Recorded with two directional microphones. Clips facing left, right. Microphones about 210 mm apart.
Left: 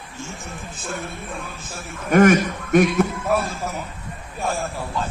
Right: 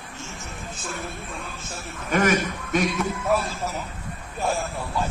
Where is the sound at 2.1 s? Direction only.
55° left (ahead or behind).